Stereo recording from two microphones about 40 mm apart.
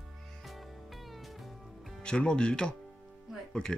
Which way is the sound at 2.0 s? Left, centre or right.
Left.